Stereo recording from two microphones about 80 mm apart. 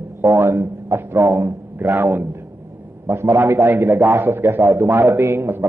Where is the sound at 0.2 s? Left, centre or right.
Right.